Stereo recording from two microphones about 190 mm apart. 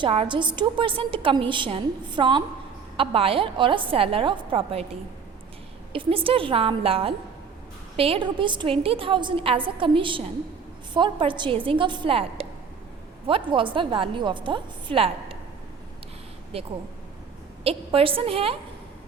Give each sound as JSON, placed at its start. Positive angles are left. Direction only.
{"t": 0.0, "sound": "a woman's voice", "side_deg": -30}
{"t": 5.9, "sound": "a woman's voice", "side_deg": -30}
{"t": 16.5, "sound": "a woman's voice", "side_deg": -30}